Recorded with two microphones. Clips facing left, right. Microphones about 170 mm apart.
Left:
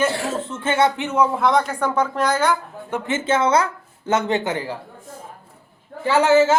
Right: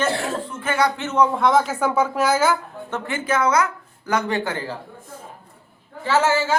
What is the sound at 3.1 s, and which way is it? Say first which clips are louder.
A man's voice: left 2 dB; 25° left (ahead or behind).